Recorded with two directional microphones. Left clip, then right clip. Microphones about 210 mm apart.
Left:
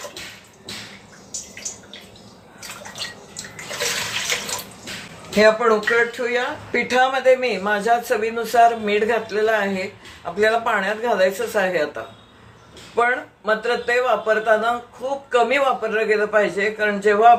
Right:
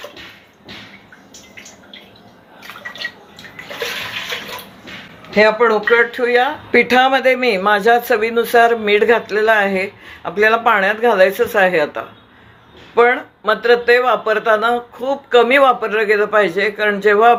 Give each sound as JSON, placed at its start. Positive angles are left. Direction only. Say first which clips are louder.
{"t": 5.3, "sound": "speech", "louder": "right 3 dB", "side_deg": -45}
{"t": 13.0, "sound": "speech", "louder": "right 7 dB", "side_deg": -45}